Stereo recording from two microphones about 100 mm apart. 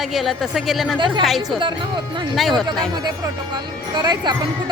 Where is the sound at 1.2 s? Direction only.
Centre (ahead or behind).